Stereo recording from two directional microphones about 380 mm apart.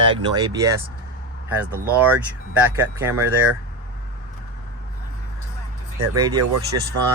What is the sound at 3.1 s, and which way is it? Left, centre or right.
Speech, right.